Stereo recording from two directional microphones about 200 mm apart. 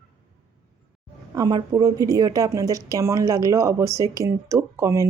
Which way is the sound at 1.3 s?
20° right (ahead or behind).